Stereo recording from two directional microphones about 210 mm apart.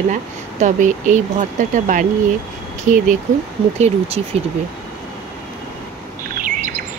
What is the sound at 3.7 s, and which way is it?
Speech, 30° right (ahead or behind).